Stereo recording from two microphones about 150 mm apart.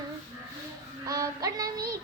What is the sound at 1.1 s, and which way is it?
Synthetic singing, 25° right (ahead or behind).